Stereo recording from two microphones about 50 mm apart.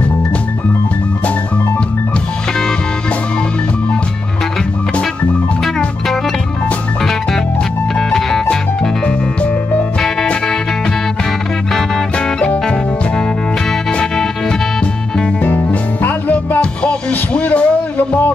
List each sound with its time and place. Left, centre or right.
8.1 s music: centre
11.7 s music: centre
15.7 s music: left